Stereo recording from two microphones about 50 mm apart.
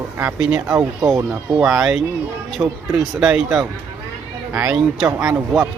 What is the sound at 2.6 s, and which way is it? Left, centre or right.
Speech, right.